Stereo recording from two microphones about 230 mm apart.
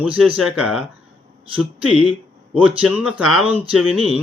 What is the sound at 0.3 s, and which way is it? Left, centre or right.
Speech, centre.